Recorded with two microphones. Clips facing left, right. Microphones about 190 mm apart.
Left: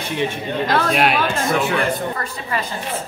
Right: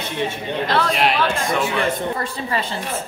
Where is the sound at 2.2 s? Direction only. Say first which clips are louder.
Right 1 dB; 30° right (ahead or behind).